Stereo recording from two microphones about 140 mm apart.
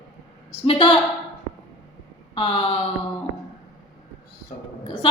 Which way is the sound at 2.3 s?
40° left (ahead or behind).